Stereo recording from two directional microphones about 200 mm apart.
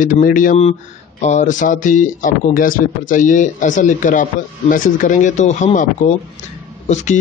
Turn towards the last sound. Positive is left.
turn(degrees=35)  # may be behind; listen again after turning